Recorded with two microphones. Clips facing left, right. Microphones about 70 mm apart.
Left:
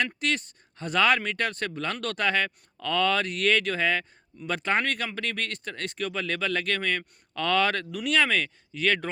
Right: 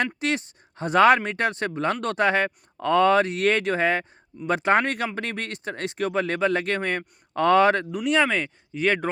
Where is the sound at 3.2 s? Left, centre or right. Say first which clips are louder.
Right 3 dB; right.